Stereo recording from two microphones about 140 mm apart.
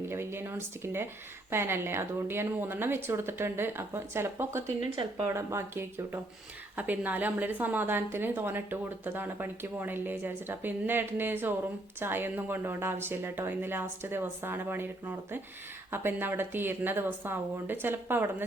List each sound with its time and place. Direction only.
0.1 s a woman's voice: 15° right (ahead or behind)